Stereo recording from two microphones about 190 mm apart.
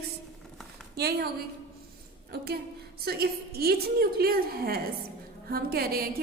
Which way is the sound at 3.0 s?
55° right (ahead or behind).